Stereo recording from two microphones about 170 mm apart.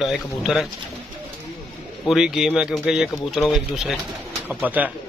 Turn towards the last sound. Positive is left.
turn(degrees=-10)  # may be behind; listen again after turning